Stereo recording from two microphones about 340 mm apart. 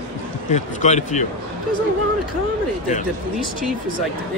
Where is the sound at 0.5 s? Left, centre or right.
Centre.